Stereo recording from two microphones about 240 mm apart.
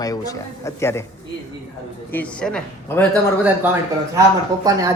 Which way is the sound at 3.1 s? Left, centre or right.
Centre.